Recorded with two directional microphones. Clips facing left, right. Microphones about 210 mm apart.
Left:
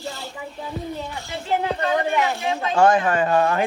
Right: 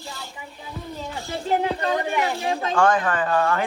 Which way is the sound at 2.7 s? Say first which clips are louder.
Left 3 dB; 20° left (ahead or behind).